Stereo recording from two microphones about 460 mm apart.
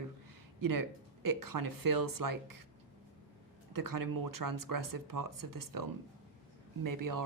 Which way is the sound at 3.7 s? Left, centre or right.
Right.